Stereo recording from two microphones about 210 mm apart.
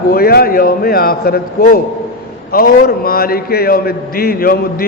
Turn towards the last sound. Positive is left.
turn(degrees=45)  # may be behind; listen again after turning